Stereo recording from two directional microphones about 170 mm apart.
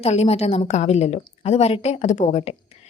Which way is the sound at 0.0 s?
40° left (ahead or behind).